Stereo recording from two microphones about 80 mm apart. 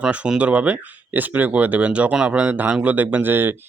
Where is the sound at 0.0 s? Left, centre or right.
Centre.